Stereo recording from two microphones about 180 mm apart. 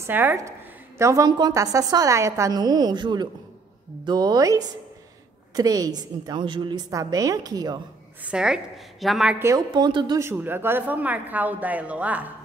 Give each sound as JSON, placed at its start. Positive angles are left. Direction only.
{"t": 0.0, "sound": "a woman's voice", "side_deg": -10}
{"t": 8.2, "sound": "a woman's voice", "side_deg": -5}
{"t": 9.4, "sound": "a woman's voice", "side_deg": -20}
{"t": 10.2, "sound": "a woman's voice", "side_deg": -10}